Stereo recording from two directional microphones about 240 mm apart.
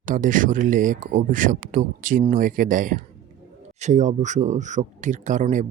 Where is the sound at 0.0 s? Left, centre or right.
Right.